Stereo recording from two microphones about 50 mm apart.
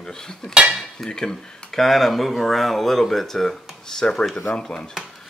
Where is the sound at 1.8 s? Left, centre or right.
Centre.